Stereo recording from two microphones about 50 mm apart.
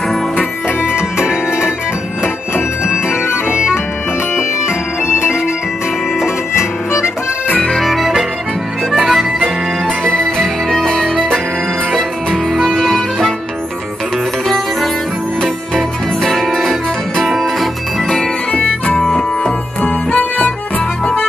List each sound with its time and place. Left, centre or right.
0.8 s music: centre
4.4 s bagpipes: centre
6.1 s harmonica: centre
7.8 s accordion: centre
9.0 s music: centre
10.1 s music: centre
11.9 s music: centre
15.4 s music: centre
18.5 s music: left
19.8 s music: left